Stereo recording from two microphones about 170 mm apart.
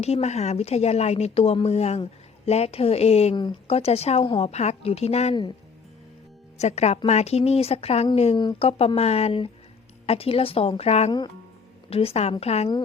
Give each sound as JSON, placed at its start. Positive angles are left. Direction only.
{"t": 0.0, "sound": "speech", "side_deg": 40}
{"t": 6.6, "sound": "speech", "side_deg": 40}